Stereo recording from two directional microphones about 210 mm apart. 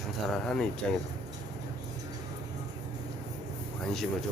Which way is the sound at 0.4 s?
5° left (ahead or behind).